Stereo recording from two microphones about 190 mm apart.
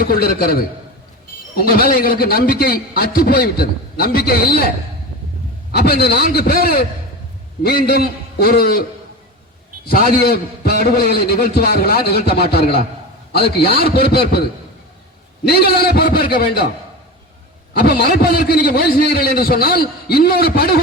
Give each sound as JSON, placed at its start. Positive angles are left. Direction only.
{"t": 0.0, "sound": "a man's voice", "side_deg": 50}
{"t": 1.7, "sound": "a man's voice", "side_deg": 50}
{"t": 5.7, "sound": "a man's voice", "side_deg": 55}
{"t": 9.8, "sound": "a man's voice", "side_deg": 50}
{"t": 15.4, "sound": "a man's voice", "side_deg": 55}
{"t": 17.7, "sound": "a man's voice", "side_deg": 55}